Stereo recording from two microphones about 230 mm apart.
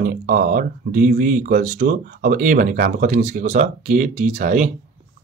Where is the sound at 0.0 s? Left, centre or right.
Right.